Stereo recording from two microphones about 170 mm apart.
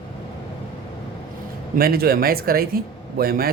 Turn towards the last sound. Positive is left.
turn(degrees=-60)  # may be behind; listen again after turning